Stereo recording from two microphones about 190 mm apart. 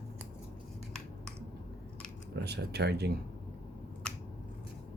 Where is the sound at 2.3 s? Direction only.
60° right (ahead or behind).